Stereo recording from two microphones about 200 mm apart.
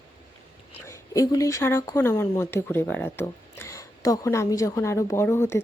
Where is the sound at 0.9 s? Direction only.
15° left (ahead or behind).